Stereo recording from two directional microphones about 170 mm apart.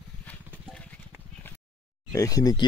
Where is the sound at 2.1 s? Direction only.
20° left (ahead or behind).